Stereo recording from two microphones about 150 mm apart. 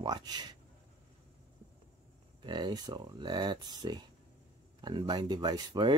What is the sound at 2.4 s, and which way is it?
Speech, 30° right (ahead or behind).